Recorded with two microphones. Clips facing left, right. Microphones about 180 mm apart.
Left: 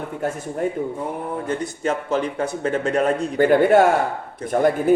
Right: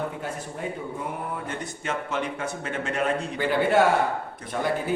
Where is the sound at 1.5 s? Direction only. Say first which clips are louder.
Left 8 dB; 35° left (ahead or behind).